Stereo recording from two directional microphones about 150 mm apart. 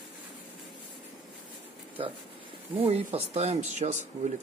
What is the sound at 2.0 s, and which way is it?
Speech, 40° right (ahead or behind).